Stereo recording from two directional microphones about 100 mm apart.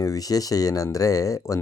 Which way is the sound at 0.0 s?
35° left (ahead or behind).